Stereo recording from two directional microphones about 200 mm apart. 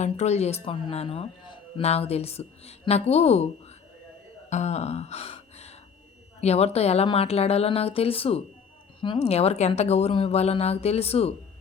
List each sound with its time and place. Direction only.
0.0 s speech: 35° left (ahead or behind)
4.4 s gasp: 35° left (ahead or behind)
6.4 s speech: 30° left (ahead or behind)